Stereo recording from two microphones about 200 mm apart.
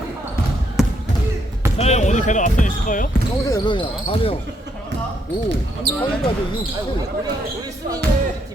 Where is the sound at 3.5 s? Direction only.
20° left (ahead or behind).